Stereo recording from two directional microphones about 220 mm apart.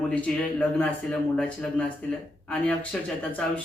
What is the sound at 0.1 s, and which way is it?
Speech, 5° left (ahead or behind).